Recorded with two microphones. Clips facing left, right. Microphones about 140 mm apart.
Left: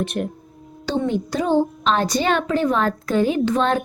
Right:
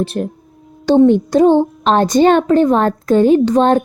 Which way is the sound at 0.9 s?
55° right (ahead or behind).